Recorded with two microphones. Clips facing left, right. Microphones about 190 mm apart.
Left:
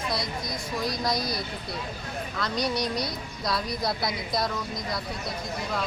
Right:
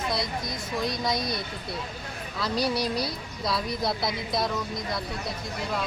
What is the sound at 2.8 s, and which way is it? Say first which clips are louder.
Speech: right 1 dB; 30° right (ahead or behind).